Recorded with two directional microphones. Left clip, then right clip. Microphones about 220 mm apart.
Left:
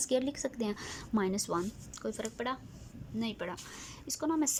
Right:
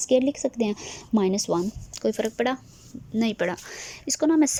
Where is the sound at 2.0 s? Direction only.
25° right (ahead or behind).